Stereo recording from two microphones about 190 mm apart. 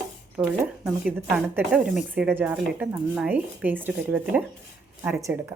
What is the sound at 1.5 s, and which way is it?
Speech, 5° right (ahead or behind).